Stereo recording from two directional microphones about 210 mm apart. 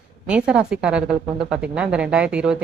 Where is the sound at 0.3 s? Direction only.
5° right (ahead or behind).